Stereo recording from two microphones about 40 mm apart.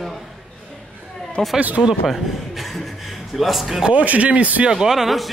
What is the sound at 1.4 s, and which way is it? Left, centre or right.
Speech, centre.